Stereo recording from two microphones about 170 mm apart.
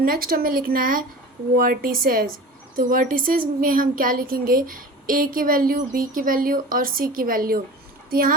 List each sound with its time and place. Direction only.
0.0 s speech: 60° right (ahead or behind)